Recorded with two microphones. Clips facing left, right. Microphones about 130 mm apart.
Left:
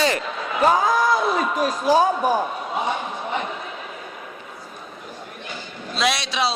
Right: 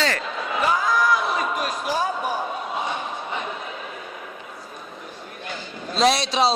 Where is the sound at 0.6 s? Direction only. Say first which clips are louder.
Left 3 dB; 60° left (ahead or behind).